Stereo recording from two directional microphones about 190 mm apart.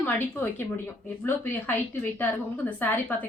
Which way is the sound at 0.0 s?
10° left (ahead or behind).